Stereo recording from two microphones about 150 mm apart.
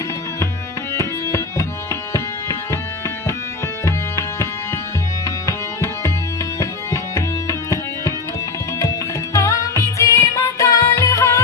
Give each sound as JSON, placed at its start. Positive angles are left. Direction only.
{"t": 0.9, "sound": "music", "side_deg": 20}
{"t": 3.8, "sound": "music", "side_deg": 20}